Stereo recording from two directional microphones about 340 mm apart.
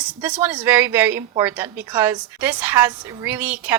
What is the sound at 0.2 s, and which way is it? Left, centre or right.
A woman's voice, centre.